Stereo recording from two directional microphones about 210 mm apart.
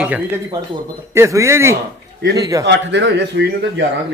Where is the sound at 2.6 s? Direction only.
55° right (ahead or behind).